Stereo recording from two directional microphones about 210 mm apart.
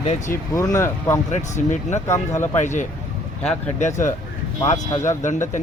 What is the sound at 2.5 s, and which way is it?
Speech, 35° left (ahead or behind).